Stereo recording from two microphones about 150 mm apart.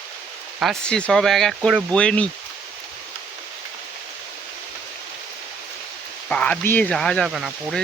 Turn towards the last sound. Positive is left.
turn(degrees=-5)  # may be behind; listen again after turning